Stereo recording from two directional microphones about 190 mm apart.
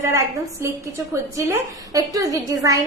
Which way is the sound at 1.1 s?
15° right (ahead or behind).